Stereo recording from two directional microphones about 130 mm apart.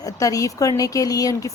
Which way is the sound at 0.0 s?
25° left (ahead or behind).